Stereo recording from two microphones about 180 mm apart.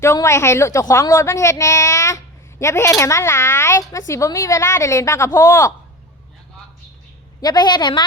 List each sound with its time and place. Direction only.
0.0 s a woman's voice: 15° left (ahead or behind)
7.4 s a woman's voice: 25° left (ahead or behind)